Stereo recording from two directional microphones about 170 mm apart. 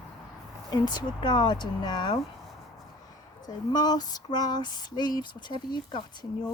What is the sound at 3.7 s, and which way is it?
Speech, 25° left (ahead or behind).